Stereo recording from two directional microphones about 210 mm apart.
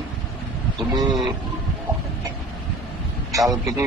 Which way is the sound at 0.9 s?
20° right (ahead or behind).